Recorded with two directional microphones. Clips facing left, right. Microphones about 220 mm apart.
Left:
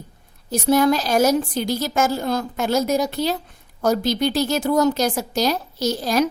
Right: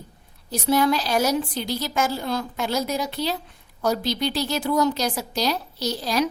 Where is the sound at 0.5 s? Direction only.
45° left (ahead or behind).